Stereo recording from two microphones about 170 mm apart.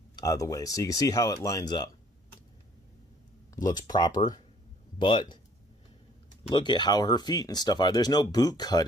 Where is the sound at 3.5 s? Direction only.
25° left (ahead or behind).